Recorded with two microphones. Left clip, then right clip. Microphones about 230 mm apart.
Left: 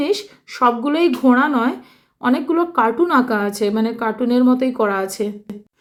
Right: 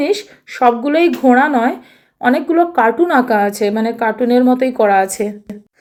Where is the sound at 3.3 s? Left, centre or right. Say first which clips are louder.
Right 6 dB; left.